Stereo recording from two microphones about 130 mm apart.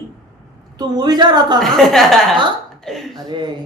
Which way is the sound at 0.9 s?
35° right (ahead or behind).